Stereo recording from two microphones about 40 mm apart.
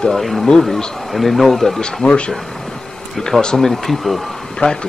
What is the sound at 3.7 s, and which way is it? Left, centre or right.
Speech, centre.